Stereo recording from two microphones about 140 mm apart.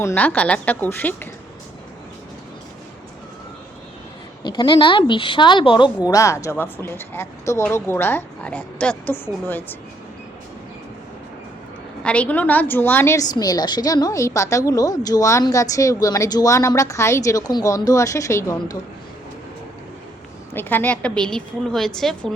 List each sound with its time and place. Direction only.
0.0 s a woman's voice: 15° left (ahead or behind)
4.4 s a woman's voice: 30° left (ahead or behind)
6.1 s a woman's voice: 25° left (ahead or behind)
12.0 s a woman's voice: 10° left (ahead or behind)
20.5 s a woman's voice: 15° left (ahead or behind)